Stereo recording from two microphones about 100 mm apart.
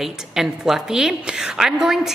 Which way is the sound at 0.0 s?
5° right (ahead or behind).